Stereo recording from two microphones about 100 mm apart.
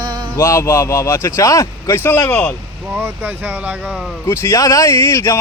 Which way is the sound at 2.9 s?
20° right (ahead or behind).